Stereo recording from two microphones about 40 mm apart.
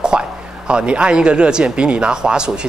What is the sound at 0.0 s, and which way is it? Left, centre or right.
Speech, right.